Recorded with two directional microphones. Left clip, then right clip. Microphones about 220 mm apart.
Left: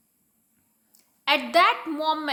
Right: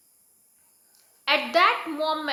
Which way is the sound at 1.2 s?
40° left (ahead or behind).